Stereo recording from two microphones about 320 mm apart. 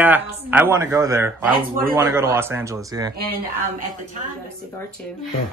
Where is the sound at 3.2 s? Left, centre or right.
Right.